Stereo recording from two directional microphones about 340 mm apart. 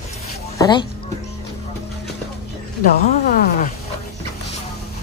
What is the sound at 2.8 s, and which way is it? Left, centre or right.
Speech, left.